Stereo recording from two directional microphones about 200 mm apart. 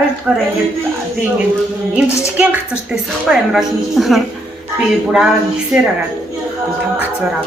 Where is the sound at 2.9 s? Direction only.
5° right (ahead or behind).